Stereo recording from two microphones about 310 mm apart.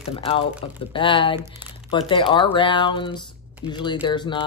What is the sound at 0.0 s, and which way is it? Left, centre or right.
Speech, centre.